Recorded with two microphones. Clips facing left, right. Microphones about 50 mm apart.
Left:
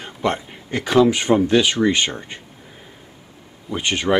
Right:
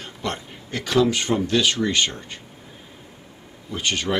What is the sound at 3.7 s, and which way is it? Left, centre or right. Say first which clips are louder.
Speech: left 5 dB; centre.